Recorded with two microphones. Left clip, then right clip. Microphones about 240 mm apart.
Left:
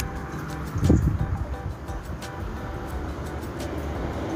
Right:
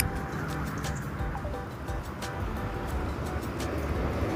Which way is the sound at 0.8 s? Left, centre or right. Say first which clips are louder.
Left 12 dB; centre.